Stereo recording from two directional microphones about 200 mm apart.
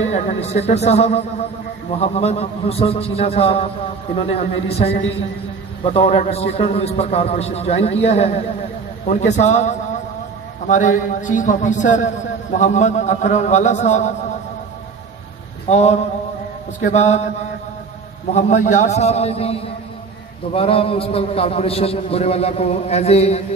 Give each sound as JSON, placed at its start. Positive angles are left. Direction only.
{"t": 0.1, "sound": "a man's voice", "side_deg": 35}
{"t": 5.9, "sound": "a man's voice", "side_deg": 30}
{"t": 15.7, "sound": "a man's voice", "side_deg": 35}
{"t": 18.3, "sound": "a man's voice", "side_deg": 35}
{"t": 20.5, "sound": "a man's voice", "side_deg": 30}